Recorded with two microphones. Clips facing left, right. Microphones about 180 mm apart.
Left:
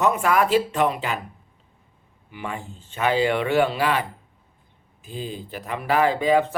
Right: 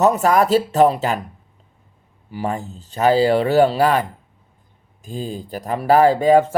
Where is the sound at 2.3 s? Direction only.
40° right (ahead or behind).